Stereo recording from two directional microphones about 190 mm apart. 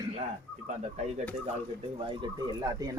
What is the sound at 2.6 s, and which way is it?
Speech, 20° right (ahead or behind).